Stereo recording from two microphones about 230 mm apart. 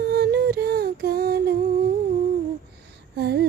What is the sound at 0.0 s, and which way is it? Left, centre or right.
Music, right.